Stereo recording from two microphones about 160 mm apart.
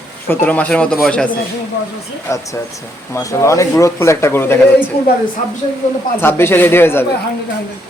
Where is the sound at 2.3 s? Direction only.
20° left (ahead or behind).